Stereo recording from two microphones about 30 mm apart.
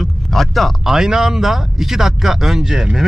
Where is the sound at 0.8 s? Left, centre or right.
Centre.